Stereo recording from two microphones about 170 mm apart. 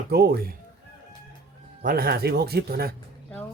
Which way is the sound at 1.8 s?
60° right (ahead or behind).